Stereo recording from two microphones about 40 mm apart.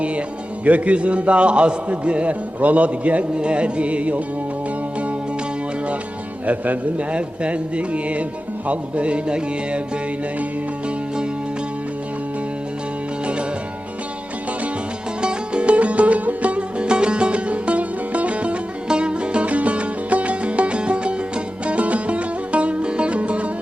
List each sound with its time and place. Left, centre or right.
0.6 s a man's voice: right
3.3 s music: right
6.4 s a man's voice: right
8.6 s music: right
15.2 s music: right